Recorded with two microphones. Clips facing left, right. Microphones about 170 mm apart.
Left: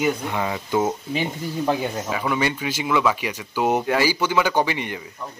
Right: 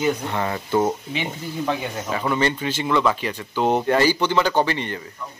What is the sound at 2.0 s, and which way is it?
Speech, 10° left (ahead or behind).